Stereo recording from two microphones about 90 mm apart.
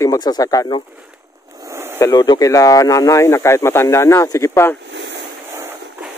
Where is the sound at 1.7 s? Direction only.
30° right (ahead or behind).